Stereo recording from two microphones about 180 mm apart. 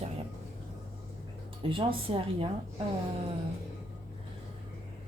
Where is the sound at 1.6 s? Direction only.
30° right (ahead or behind).